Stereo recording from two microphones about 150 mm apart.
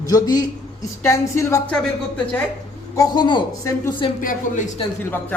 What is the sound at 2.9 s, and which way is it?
Speech, 25° left (ahead or behind).